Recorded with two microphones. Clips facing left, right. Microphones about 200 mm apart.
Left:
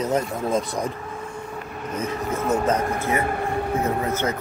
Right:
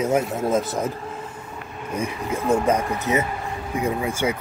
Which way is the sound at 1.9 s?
10° right (ahead or behind).